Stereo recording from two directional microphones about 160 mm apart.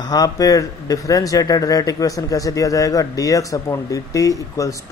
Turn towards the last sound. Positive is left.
turn(degrees=20)  # may be behind; listen again after turning